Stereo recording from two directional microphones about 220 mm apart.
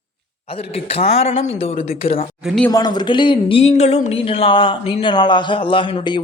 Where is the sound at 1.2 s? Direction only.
30° left (ahead or behind).